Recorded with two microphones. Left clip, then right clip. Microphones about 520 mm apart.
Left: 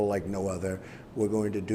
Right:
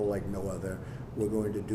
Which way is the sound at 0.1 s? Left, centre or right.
Left.